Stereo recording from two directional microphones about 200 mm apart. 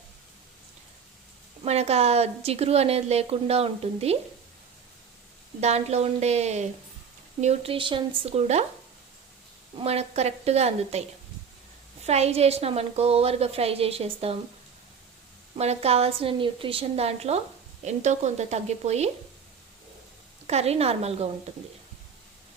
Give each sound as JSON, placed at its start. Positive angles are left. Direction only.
{"t": 1.6, "sound": "speech", "side_deg": -30}
{"t": 5.5, "sound": "speech", "side_deg": -35}
{"t": 9.7, "sound": "speech", "side_deg": -30}
{"t": 12.0, "sound": "speech", "side_deg": -30}
{"t": 15.5, "sound": "speech", "side_deg": -30}
{"t": 20.5, "sound": "speech", "side_deg": -30}